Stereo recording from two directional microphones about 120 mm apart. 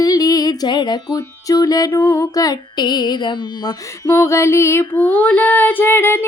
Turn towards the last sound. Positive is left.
turn(degrees=20)  # may be behind; listen again after turning